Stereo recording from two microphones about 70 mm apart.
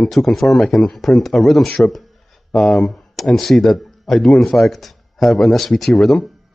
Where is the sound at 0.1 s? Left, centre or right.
Centre.